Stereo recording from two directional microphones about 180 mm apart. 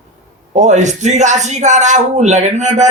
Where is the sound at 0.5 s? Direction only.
40° right (ahead or behind).